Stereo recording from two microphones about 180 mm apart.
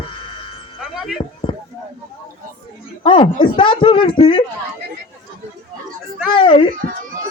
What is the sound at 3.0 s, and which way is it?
Speech, 30° left (ahead or behind).